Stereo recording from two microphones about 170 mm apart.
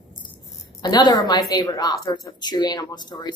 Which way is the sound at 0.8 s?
25° left (ahead or behind).